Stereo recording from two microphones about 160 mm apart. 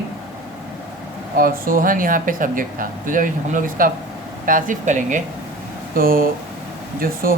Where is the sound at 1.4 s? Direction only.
65° right (ahead or behind).